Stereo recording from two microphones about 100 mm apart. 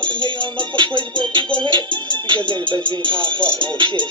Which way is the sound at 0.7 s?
55° right (ahead or behind).